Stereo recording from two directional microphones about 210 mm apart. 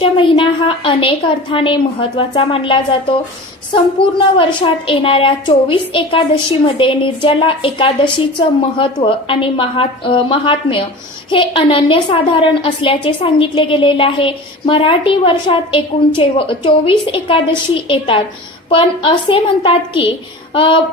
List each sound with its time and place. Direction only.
0.0 s a woman's voice: 25° left (ahead or behind)